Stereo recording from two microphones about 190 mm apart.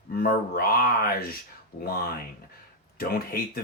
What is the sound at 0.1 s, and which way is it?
Speech, 50° left (ahead or behind).